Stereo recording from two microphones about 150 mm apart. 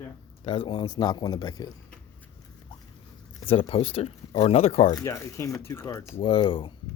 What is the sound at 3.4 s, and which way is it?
Speech, 40° left (ahead or behind).